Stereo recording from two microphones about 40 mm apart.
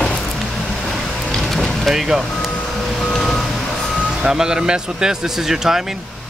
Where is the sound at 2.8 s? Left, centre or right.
Centre.